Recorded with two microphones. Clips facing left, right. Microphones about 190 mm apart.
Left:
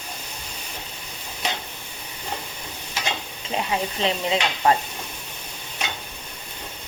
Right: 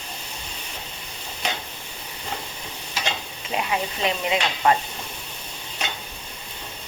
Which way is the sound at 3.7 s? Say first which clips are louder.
Left 2 dB; 30° left (ahead or behind).